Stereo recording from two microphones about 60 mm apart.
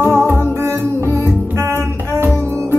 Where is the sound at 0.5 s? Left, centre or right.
Right.